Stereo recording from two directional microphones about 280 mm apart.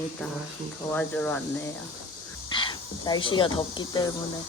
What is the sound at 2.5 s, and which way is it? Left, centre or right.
Speech, centre.